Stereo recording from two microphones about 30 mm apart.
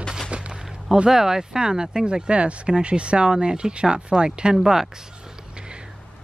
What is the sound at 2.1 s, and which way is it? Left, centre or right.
Speech, right.